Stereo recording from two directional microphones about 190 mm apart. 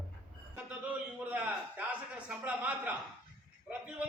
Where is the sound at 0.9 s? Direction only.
5° right (ahead or behind).